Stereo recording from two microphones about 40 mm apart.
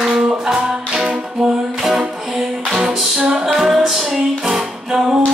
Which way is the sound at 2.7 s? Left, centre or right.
Centre.